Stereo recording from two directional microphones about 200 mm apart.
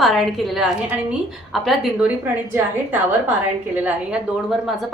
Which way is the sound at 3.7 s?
5° right (ahead or behind).